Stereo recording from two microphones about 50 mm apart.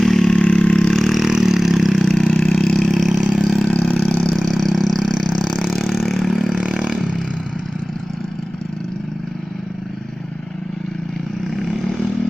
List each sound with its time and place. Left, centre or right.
0.0 s vehicle: centre
0.3 s vehicle: centre
0.8 s vehicle: centre
1.2 s vehicle: centre
2.2 s vehicle: centre
3.2 s vehicle: centre
3.7 s vehicle: left
4.1 s vehicle: centre
5.4 s vehicle: centre
6.3 s vehicle: centre
11.5 s vehicle: centre